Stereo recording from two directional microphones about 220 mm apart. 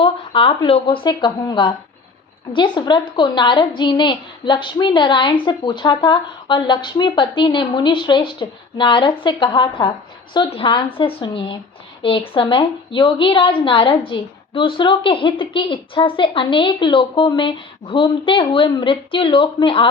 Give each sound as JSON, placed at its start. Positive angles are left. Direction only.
{"t": 0.0, "sound": "a woman's voice", "side_deg": 25}